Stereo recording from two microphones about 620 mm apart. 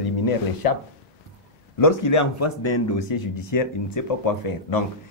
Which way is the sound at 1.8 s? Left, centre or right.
Left.